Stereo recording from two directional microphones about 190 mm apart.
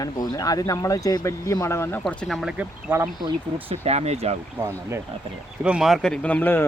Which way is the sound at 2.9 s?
20° right (ahead or behind).